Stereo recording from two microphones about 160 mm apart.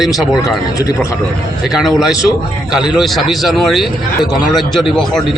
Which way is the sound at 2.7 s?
5° right (ahead or behind).